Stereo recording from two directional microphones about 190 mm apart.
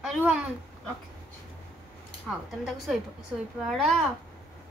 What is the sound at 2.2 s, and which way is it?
Speech, centre (ahead or behind).